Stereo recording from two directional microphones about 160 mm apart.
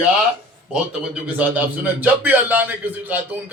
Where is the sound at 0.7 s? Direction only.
5° right (ahead or behind).